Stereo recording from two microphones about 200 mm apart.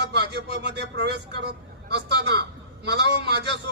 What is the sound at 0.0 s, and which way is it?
Speech, 55° right (ahead or behind).